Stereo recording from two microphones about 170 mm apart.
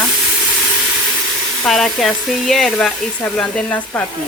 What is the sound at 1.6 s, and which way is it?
Speech, centre (ahead or behind).